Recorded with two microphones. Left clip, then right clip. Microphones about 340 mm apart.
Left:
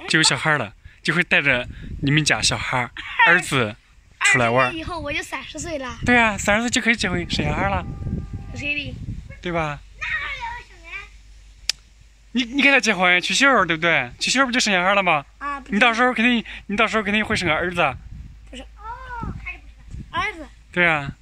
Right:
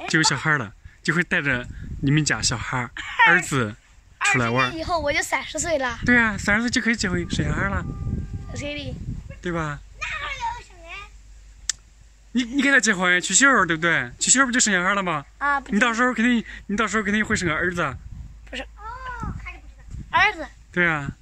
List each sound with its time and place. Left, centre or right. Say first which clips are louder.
0.0 s speech: left 3 dB; centre
4.8 s a woman's voice: right 5 dB; right
6.0 s speech: left 3 dB; centre
8.5 s speech: left 6 dB; centre
9.4 s a sound: left 3 dB; centre
12.4 s speech: left 2 dB; centre
15.3 s a sound: right 6 dB; right
15.7 s speech: left 9 dB; centre
20.1 s a sound: right 6 dB; right
20.7 s speech: left 3 dB; centre